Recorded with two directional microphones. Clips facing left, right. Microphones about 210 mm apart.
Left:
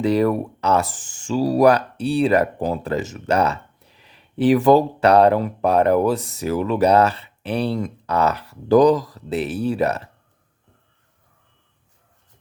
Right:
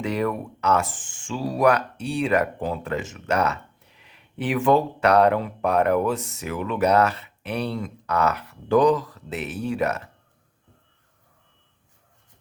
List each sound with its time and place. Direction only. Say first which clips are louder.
0.0 s speech: left 7 dB; 35° left (ahead or behind)